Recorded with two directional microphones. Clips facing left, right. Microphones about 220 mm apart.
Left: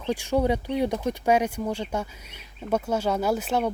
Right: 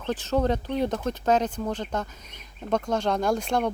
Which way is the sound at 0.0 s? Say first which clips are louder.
Left 1 dB; 10° left (ahead or behind).